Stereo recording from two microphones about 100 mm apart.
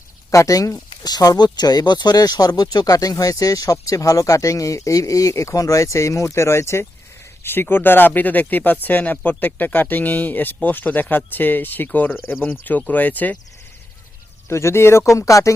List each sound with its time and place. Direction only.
0.3 s speech: 35° left (ahead or behind); by 13.4 s 15° left (ahead or behind)
14.5 s speech: 25° left (ahead or behind)